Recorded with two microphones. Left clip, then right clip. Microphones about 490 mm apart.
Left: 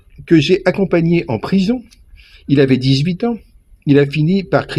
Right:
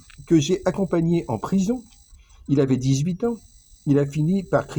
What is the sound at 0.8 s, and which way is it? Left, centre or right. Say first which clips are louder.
Speech: left 8 dB; right.